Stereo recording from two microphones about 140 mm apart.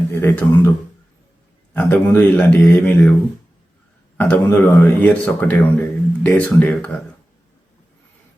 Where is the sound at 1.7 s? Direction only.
10° left (ahead or behind).